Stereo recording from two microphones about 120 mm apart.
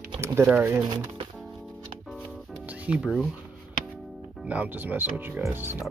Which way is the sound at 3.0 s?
Centre (ahead or behind).